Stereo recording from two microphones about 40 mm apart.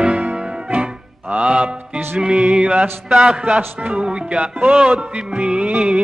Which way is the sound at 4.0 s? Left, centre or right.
Right.